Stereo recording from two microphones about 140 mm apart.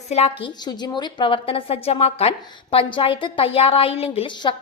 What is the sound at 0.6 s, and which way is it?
A woman's voice, 30° left (ahead or behind).